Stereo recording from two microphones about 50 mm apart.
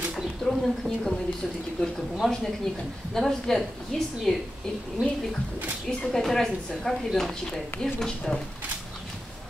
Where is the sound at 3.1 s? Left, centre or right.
Centre.